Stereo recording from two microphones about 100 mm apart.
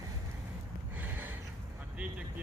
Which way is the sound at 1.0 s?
20° right (ahead or behind).